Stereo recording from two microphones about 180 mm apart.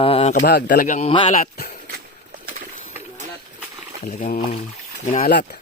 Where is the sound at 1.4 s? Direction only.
60° left (ahead or behind).